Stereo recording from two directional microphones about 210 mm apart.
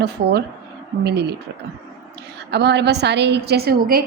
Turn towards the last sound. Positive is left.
turn(degrees=-45)  # may be behind; listen again after turning